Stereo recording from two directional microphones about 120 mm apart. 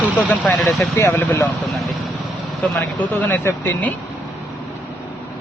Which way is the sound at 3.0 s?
15° left (ahead or behind).